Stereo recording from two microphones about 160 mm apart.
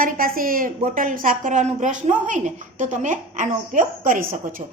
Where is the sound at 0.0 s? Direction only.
65° right (ahead or behind).